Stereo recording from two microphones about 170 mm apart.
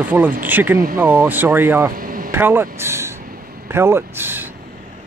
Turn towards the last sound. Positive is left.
turn(degrees=-10)  # may be behind; listen again after turning